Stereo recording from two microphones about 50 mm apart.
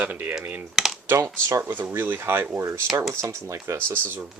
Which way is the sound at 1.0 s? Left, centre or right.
Right.